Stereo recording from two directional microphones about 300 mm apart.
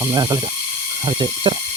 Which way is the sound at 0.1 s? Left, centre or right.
Centre.